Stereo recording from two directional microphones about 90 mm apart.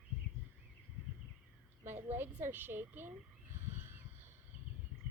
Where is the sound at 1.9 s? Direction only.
25° right (ahead or behind).